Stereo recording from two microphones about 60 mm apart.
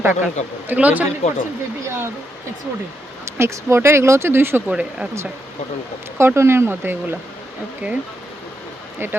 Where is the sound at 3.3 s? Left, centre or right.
Right.